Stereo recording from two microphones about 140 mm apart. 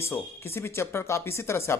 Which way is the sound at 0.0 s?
15° left (ahead or behind).